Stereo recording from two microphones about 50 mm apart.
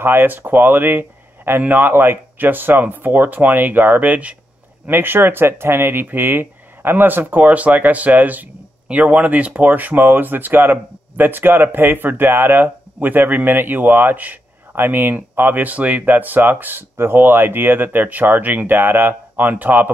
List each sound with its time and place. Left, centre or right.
0.0 s speech: right
4.8 s speech: right